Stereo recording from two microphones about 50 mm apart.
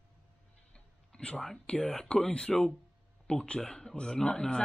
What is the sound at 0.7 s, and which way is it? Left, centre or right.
Music, centre.